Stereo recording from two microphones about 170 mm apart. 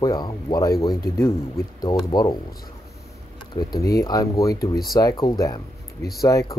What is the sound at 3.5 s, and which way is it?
Speech, 25° left (ahead or behind).